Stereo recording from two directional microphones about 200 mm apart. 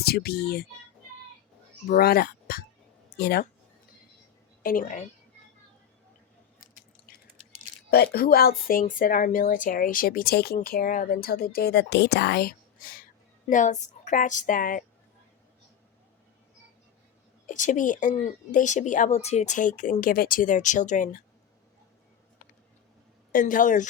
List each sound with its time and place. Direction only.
0.0 s a woman's voice: 50° left (ahead or behind)
1.9 s a woman's voice: 50° left (ahead or behind)
4.6 s a woman's voice: 40° left (ahead or behind)
7.9 s a woman's voice: 50° left (ahead or behind)
17.4 s a woman's voice: 40° left (ahead or behind)
23.3 s a woman's voice: 45° left (ahead or behind)